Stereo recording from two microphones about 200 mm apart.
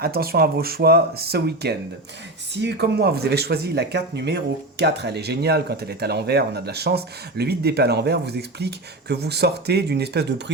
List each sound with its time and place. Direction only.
0.0 s speech: 50° right (ahead or behind)